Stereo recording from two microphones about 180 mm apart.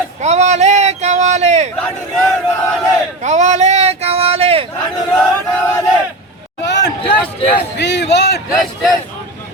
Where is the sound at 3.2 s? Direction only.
40° right (ahead or behind).